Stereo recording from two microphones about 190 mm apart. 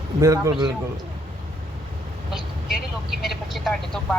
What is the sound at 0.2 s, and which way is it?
Speech, 15° right (ahead or behind).